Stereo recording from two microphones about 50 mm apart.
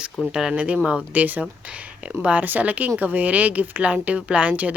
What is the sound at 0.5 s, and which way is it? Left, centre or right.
Speech, right.